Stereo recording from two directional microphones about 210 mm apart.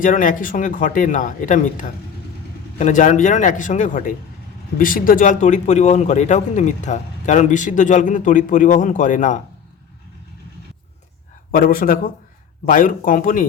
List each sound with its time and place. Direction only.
0.0 s speech: 40° left (ahead or behind)
11.5 s speech: 40° left (ahead or behind)